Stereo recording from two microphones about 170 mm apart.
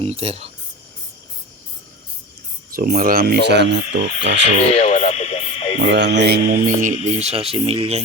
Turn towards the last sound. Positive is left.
turn(degrees=-35)  # may be behind; listen again after turning